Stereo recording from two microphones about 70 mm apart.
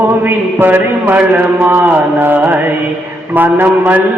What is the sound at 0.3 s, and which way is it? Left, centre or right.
A man's voice, right.